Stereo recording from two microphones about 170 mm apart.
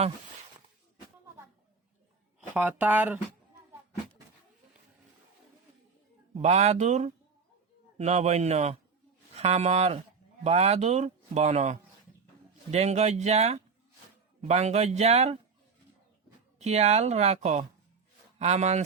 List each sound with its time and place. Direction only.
2.6 s speech: 10° right (ahead or behind)
6.3 s a man's voice: 40° right (ahead or behind)
16.6 s a man's voice: 40° right (ahead or behind)